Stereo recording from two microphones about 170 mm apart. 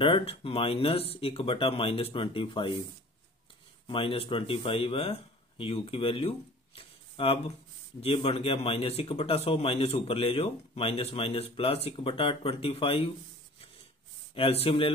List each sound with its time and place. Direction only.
0.0 s a man's voice: 35° left (ahead or behind)
3.8 s a man's voice: 30° left (ahead or behind)
14.3 s a man's voice: 35° left (ahead or behind)